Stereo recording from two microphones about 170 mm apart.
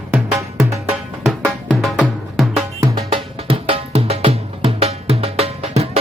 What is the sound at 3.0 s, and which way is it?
Music, 35° right (ahead or behind).